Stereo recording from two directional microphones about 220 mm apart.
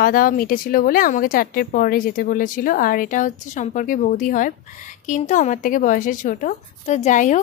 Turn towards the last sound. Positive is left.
turn(degrees=35)  # may be behind; listen again after turning